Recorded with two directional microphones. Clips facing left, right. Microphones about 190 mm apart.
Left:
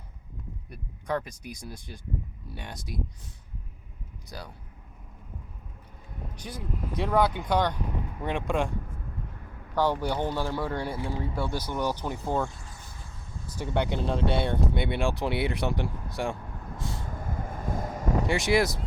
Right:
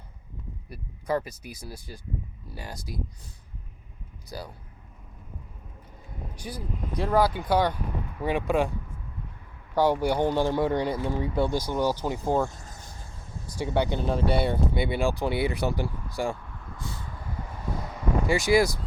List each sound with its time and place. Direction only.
0.7 s speech: 5° right (ahead or behind)
4.3 s speech: 5° right (ahead or behind)
6.3 s speech: 5° right (ahead or behind)
9.7 s speech: 10° right (ahead or behind)
12.5 s vehicle: 45° right (ahead or behind)
13.7 s speech: centre (ahead or behind)
17.0 s vehicle: 45° left (ahead or behind)
18.3 s speech: centre (ahead or behind)